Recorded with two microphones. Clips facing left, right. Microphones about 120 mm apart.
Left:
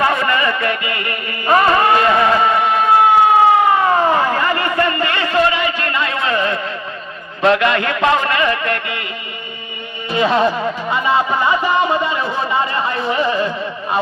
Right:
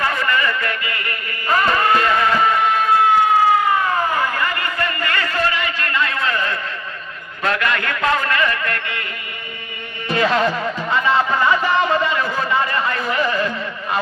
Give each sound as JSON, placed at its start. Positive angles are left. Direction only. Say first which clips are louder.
{"t": 0.0, "sound": "music", "louder": "left 4 dB", "side_deg": 20}
{"t": 7.4, "sound": "a man's voice", "louder": "left 6 dB", "side_deg": 20}
{"t": 10.1, "sound": "speech", "louder": "left 3 dB", "side_deg": 20}